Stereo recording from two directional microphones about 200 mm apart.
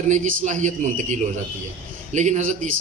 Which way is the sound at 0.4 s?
40° right (ahead or behind).